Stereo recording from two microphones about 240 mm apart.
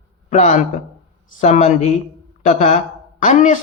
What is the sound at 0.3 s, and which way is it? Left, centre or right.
Speech, left.